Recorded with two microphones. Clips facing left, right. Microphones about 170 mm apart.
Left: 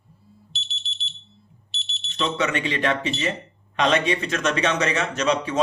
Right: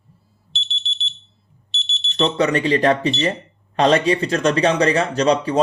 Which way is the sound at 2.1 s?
35° right (ahead or behind).